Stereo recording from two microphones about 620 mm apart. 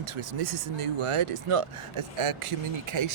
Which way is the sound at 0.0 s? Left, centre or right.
Right.